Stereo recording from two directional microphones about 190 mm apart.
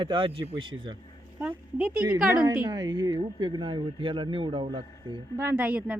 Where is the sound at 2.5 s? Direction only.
15° right (ahead or behind).